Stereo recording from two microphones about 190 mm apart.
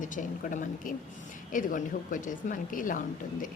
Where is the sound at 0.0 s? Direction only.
45° left (ahead or behind).